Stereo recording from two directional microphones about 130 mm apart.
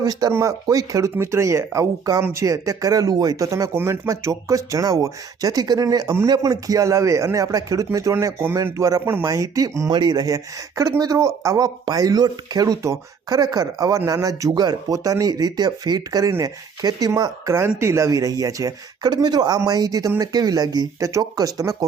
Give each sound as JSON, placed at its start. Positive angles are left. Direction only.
{"t": 0.0, "sound": "speech", "side_deg": -30}